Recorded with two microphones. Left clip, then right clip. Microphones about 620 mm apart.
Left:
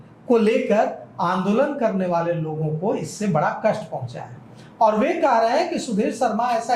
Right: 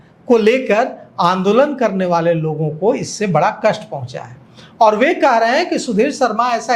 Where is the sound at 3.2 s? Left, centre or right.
Right.